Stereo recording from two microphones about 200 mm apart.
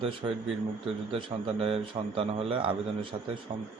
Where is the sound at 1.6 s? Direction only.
30° right (ahead or behind).